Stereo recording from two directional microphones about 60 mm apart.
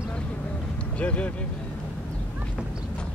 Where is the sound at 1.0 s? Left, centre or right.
Left.